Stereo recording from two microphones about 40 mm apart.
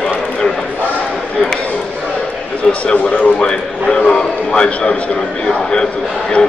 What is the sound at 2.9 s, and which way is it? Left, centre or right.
Speech, left.